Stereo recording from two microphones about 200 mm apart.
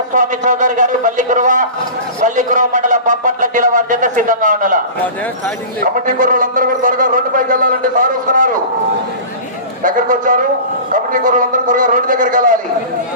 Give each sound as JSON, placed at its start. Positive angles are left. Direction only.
{"t": 0.1, "sound": "a man's voice", "side_deg": -40}
{"t": 5.8, "sound": "a man's voice", "side_deg": -45}
{"t": 9.8, "sound": "a man's voice", "side_deg": -40}